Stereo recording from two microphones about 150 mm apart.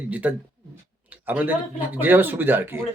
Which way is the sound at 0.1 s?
10° right (ahead or behind).